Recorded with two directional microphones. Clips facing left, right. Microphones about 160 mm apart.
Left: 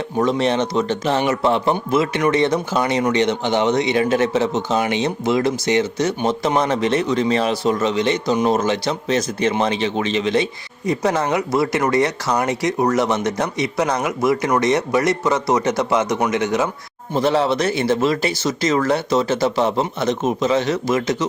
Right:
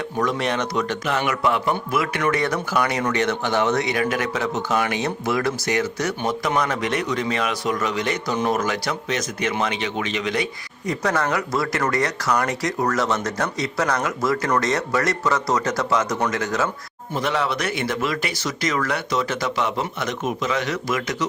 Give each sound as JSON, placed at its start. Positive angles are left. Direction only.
{"t": 0.2, "sound": "speech", "side_deg": 30}
{"t": 17.2, "sound": "speech", "side_deg": 30}